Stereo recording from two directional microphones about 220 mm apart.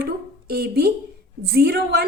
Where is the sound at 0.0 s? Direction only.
45° right (ahead or behind).